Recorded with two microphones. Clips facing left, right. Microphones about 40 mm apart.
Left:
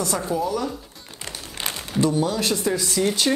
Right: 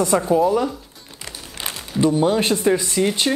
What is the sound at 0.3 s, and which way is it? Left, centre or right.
Speech, right.